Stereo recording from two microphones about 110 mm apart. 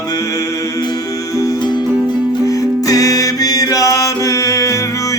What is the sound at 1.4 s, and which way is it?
Music, 40° left (ahead or behind).